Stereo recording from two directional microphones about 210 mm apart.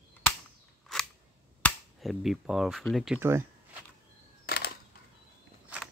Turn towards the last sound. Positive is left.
turn(degrees=50)  # may be behind; listen again after turning